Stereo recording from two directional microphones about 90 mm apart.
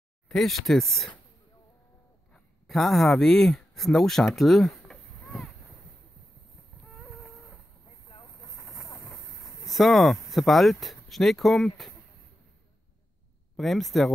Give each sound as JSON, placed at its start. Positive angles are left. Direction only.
{"t": 0.3, "sound": "speech", "side_deg": 0}
{"t": 2.3, "sound": "speech", "side_deg": 5}
{"t": 4.4, "sound": "a sound", "side_deg": 0}
{"t": 6.9, "sound": "a sound", "side_deg": 0}
{"t": 8.6, "sound": "vehicle", "side_deg": 35}
{"t": 9.4, "sound": "speech", "side_deg": 0}
{"t": 13.6, "sound": "speech", "side_deg": 0}